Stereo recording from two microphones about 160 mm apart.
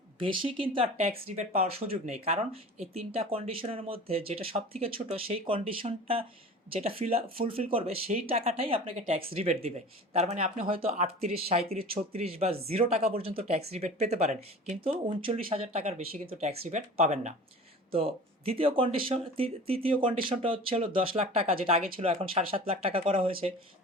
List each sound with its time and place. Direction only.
0.2 s speech: 35° right (ahead or behind)
14.8 s speech: 35° right (ahead or behind)